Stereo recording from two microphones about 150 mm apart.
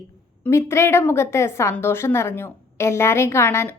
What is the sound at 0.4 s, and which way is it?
A woman's voice, 15° left (ahead or behind).